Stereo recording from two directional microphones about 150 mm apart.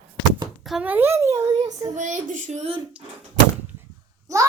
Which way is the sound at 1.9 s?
55° right (ahead or behind).